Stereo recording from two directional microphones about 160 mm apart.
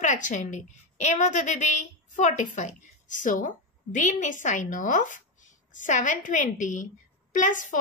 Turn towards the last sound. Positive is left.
turn(degrees=50)  # may be behind; listen again after turning